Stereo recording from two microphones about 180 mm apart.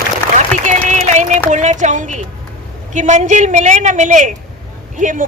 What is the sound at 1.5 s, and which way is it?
A woman's voice, 45° right (ahead or behind).